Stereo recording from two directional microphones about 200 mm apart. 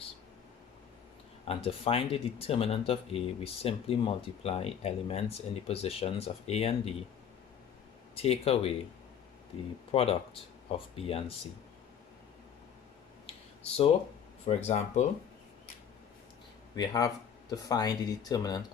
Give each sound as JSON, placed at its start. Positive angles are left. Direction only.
{"t": 1.5, "sound": "speech", "side_deg": 30}
{"t": 8.1, "sound": "speech", "side_deg": 30}
{"t": 14.4, "sound": "speech", "side_deg": 35}
{"t": 16.7, "sound": "speech", "side_deg": 20}